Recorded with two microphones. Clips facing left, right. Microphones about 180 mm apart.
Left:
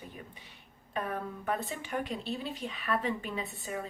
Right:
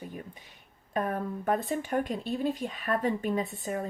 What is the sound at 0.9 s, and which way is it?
A woman's voice, 45° right (ahead or behind).